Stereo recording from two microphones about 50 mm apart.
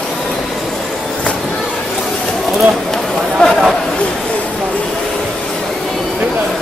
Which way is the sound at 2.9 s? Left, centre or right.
Centre.